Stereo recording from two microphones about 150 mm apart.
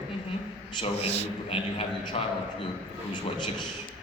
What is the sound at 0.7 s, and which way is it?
A man's voice, 40° left (ahead or behind).